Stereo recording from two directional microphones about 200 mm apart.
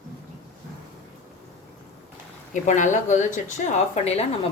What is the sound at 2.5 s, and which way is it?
A woman's voice, 40° left (ahead or behind).